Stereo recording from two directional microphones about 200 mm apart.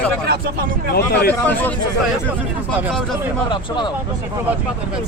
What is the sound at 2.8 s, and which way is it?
Speech, centre (ahead or behind).